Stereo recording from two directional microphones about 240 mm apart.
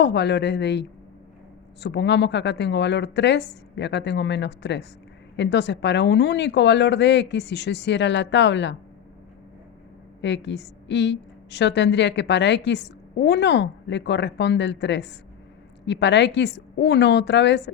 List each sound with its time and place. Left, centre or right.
0.0 s a woman's voice: left
10.2 s a woman's voice: left